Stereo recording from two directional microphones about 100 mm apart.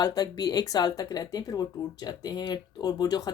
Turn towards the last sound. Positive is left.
turn(degrees=40)  # may be behind; listen again after turning